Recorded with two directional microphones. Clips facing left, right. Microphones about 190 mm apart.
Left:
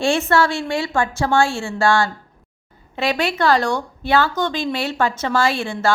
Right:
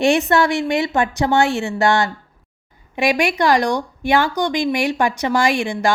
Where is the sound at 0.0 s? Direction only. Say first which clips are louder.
Right 2 dB; 15° right (ahead or behind).